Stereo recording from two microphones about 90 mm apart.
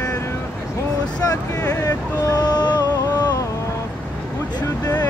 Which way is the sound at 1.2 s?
40° left (ahead or behind).